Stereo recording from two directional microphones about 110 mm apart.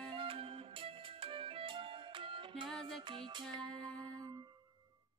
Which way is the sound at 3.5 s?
5° left (ahead or behind).